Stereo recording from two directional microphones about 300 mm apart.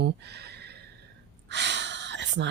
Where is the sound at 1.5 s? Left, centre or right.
Right.